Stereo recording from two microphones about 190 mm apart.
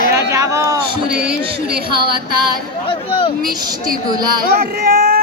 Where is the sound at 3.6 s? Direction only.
20° right (ahead or behind).